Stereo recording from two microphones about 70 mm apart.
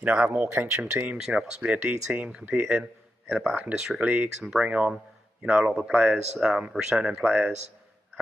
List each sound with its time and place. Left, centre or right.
0.0 s speech: centre
1.1 s speech: centre
2.1 s a man's voice: centre
4.0 s speech: right
4.5 s speech: centre